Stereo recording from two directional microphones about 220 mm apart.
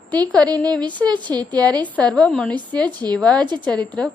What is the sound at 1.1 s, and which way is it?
Speech, 20° right (ahead or behind).